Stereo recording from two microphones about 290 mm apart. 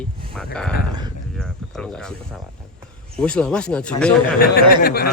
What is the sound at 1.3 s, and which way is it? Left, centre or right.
Cricket, centre.